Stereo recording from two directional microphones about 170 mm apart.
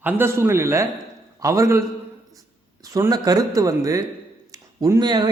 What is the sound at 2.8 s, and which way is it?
A man's voice, 20° right (ahead or behind).